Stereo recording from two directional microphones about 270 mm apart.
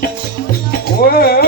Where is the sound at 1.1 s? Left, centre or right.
Left.